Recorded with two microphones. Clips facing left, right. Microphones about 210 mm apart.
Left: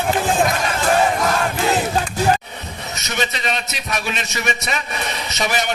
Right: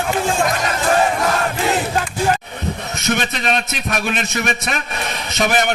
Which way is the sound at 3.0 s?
55° right (ahead or behind).